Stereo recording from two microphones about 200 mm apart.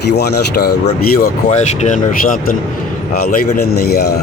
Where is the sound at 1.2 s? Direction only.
35° left (ahead or behind).